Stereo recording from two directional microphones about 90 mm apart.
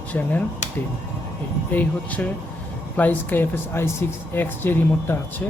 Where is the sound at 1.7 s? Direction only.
20° left (ahead or behind).